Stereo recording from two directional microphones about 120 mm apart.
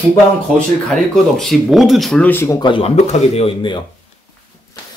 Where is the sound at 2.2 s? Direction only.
20° left (ahead or behind).